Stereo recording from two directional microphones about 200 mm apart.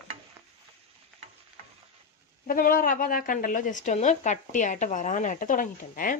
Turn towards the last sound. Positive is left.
turn(degrees=45)  # may be behind; listen again after turning